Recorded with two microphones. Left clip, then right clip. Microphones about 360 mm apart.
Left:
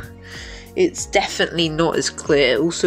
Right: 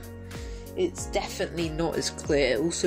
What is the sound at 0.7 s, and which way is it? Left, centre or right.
Speech, left.